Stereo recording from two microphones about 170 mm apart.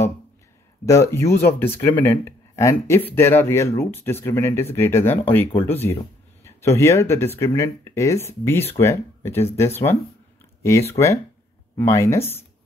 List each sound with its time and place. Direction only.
0.8 s speech: 15° left (ahead or behind)